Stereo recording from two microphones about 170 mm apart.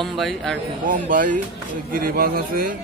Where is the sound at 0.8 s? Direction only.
50° right (ahead or behind).